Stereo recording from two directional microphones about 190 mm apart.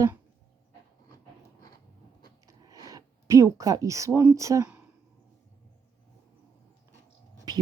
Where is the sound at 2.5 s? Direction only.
20° right (ahead or behind).